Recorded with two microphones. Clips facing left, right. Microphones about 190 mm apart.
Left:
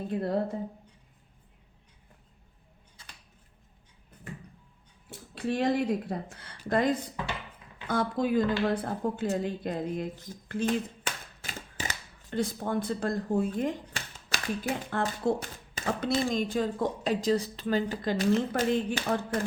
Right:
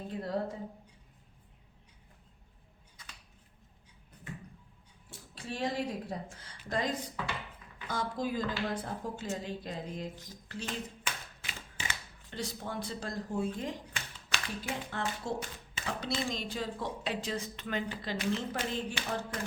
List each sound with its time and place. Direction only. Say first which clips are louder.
0.1 s speech: left 5 dB; 60° left (ahead or behind)
3.0 s scissors: left 1 dB; 30° left (ahead or behind)
5.3 s speech: left 8 dB; 60° left (ahead or behind)
11.0 s a sound: left 3 dB; 40° left (ahead or behind)
14.6 s speech: left 6 dB; 50° left (ahead or behind)